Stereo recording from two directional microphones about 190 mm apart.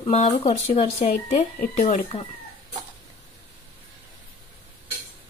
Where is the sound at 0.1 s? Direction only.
35° left (ahead or behind).